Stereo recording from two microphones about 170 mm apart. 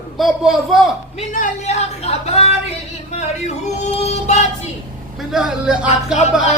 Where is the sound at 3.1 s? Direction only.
40° left (ahead or behind).